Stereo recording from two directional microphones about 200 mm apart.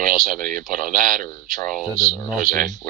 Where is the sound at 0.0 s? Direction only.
45° right (ahead or behind).